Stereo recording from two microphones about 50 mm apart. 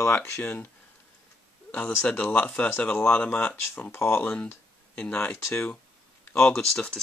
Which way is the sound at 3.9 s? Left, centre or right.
Left.